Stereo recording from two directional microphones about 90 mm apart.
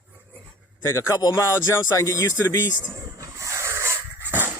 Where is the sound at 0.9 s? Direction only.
35° left (ahead or behind).